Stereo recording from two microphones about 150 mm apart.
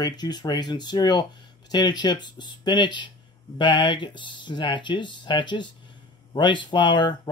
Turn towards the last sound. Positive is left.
turn(degrees=30)  # may be behind; listen again after turning